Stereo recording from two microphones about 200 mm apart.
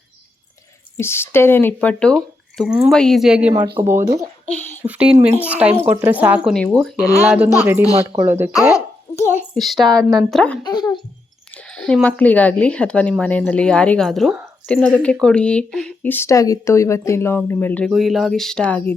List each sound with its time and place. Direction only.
0.9 s speech: 10° left (ahead or behind); by 8.4 s 15° right (ahead or behind)
8.7 s a sound: 15° left (ahead or behind)
9.6 s speech: centre (ahead or behind)
10.6 s speech: 20° left (ahead or behind)
11.5 s speech: 5° left (ahead or behind)